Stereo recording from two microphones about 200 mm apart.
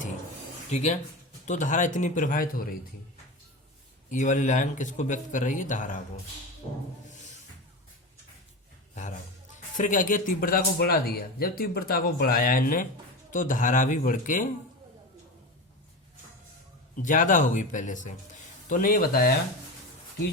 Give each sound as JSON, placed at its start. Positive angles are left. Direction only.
{"t": 0.7, "sound": "speech", "side_deg": 35}
{"t": 4.1, "sound": "speech", "side_deg": 40}
{"t": 7.1, "sound": "music", "side_deg": 35}
{"t": 9.0, "sound": "a man's voice", "side_deg": 40}
{"t": 17.0, "sound": "a man's voice", "side_deg": 40}